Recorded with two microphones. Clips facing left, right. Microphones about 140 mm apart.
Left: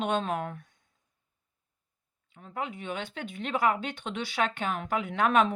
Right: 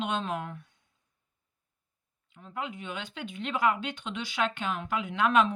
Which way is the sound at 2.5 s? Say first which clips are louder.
Left 2 dB; 45° left (ahead or behind).